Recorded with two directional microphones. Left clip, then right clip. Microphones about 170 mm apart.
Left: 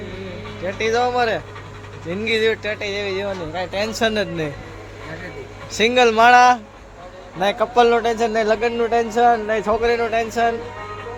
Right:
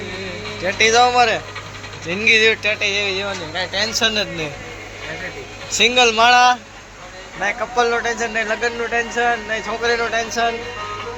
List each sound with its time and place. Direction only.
0.6 s speech: 10° left (ahead or behind); by 4.4 s 50° left (ahead or behind)
5.7 s speech: 45° left (ahead or behind)
7.6 s speech: 70° left (ahead or behind); by 9.1 s 85° left
9.1 s speech: 45° left (ahead or behind)
9.5 s speech: 60° left (ahead or behind)